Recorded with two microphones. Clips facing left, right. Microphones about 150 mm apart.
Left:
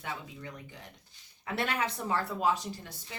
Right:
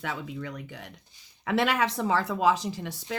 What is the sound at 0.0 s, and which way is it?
Speech, 90° right.